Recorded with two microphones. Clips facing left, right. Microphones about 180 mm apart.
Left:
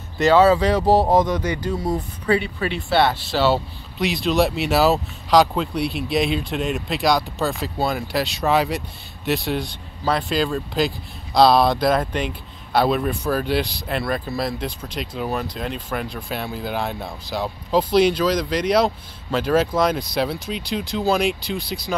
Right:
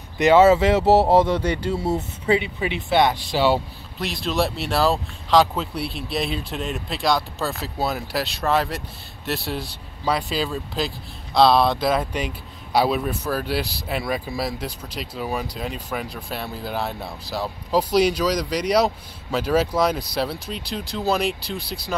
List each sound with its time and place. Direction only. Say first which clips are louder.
0.2 s speech: right 1 dB; 20° right (ahead or behind)
4.0 s speech: left 4 dB; centre (ahead or behind)